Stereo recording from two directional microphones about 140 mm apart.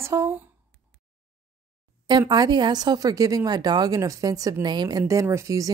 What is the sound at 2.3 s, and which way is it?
A woman's voice, 30° right (ahead or behind).